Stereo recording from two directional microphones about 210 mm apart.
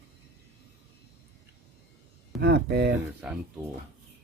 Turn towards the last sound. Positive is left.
turn(degrees=-5)  # may be behind; listen again after turning